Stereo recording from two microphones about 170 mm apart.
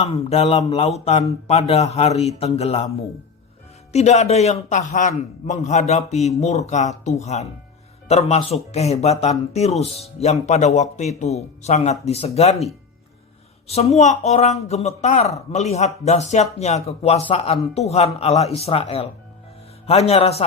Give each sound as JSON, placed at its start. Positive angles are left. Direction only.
{"t": 0.0, "sound": "speech", "side_deg": 40}
{"t": 3.9, "sound": "a man's voice", "side_deg": 40}
{"t": 13.7, "sound": "speech", "side_deg": 40}